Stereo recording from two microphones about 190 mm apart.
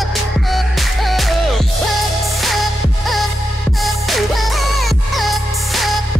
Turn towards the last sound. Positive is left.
turn(degrees=0)  # may be behind; listen again after turning